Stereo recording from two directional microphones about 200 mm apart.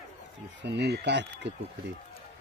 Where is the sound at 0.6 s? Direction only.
60° right (ahead or behind).